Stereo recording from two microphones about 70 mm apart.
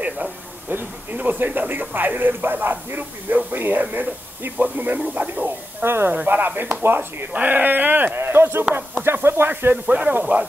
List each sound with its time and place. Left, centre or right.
0.0 s speech: right